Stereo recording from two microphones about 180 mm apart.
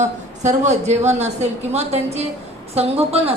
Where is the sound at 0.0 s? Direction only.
40° right (ahead or behind).